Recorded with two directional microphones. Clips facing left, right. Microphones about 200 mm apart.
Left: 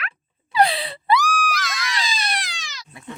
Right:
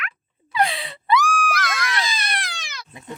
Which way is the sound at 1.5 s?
55° right (ahead or behind).